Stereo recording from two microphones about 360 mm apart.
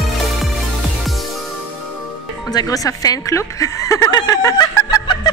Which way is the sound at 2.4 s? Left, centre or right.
Centre.